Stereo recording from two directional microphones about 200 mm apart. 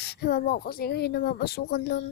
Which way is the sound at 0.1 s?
55° left (ahead or behind).